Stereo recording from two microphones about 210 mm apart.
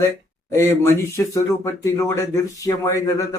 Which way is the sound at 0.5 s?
10° left (ahead or behind).